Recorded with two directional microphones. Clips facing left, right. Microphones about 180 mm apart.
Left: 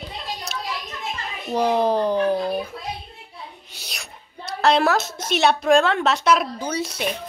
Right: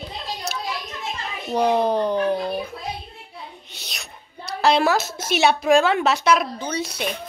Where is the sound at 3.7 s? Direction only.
5° left (ahead or behind).